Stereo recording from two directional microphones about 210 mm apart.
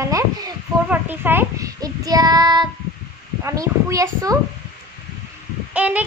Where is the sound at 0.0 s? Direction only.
15° right (ahead or behind).